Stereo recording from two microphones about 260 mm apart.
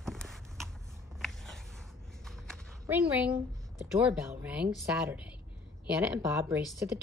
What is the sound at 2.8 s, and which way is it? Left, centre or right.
A woman's voice, centre.